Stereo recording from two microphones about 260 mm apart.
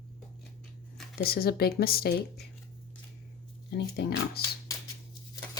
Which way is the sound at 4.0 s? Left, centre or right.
Left.